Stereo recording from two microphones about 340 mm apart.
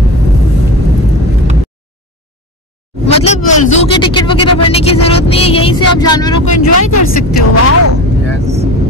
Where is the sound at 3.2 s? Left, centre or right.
Centre.